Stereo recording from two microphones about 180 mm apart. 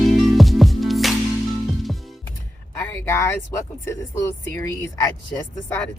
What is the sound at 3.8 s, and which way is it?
Speech, 15° left (ahead or behind).